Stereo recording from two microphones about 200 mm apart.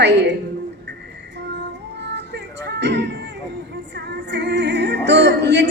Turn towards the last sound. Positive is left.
turn(degrees=-60)  # may be behind; listen again after turning